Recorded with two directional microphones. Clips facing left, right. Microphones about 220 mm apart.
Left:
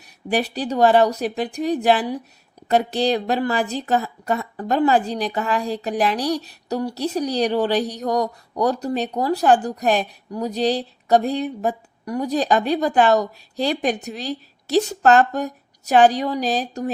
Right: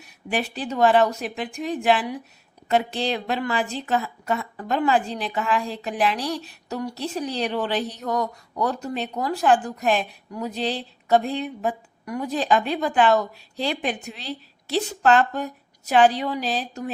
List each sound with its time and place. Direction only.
0.0 s a woman's voice: 40° left (ahead or behind)